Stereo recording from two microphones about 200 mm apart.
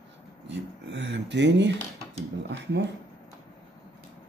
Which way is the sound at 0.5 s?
60° right (ahead or behind).